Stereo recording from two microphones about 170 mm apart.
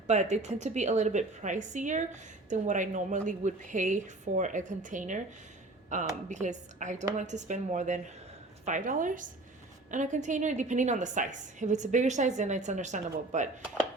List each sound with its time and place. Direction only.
0.1 s a woman's voice: 40° right (ahead or behind)